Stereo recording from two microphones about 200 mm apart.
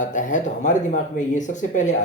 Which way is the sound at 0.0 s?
40° left (ahead or behind).